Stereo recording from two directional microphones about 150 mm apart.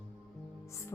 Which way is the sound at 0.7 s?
20° left (ahead or behind).